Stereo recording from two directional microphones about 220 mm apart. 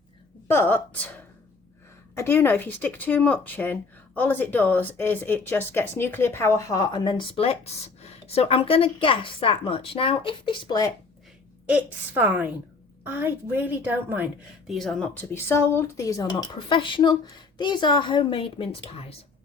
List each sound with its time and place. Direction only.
0.4 s a woman's voice: 10° left (ahead or behind)
2.1 s speech: 10° left (ahead or behind)
11.6 s a woman's voice: 5° right (ahead or behind); by 19.1 s 25° left (ahead or behind)